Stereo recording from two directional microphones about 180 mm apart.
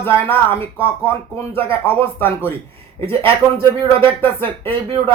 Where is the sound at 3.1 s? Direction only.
30° right (ahead or behind).